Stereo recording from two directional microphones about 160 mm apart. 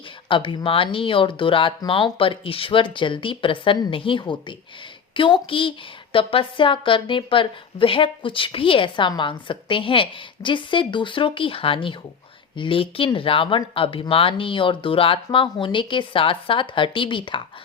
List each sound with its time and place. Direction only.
0.3 s speech: 30° left (ahead or behind)